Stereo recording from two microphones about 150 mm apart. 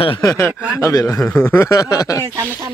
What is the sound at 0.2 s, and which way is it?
Speech, 20° left (ahead or behind).